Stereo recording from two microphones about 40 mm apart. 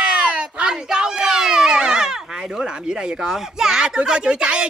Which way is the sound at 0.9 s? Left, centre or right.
Centre.